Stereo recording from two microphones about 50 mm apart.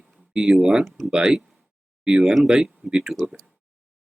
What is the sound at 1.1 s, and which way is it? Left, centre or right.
Speech, centre.